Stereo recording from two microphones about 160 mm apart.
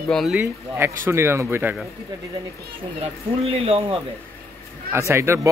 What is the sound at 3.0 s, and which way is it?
Speech, 35° right (ahead or behind).